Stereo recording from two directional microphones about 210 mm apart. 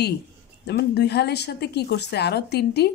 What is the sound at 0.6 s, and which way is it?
A woman's voice, 50° left (ahead or behind).